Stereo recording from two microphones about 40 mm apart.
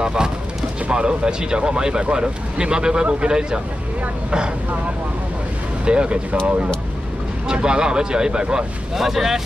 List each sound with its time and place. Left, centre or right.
0.0 s speech: centre
5.9 s speech: right
8.9 s speech: centre